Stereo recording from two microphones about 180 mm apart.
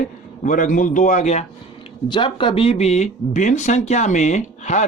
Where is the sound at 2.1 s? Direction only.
25° left (ahead or behind).